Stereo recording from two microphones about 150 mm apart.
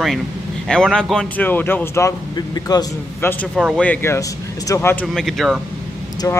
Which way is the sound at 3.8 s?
15° left (ahead or behind).